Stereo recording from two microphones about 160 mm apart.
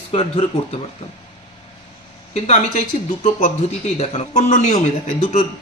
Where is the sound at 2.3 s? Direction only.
40° left (ahead or behind).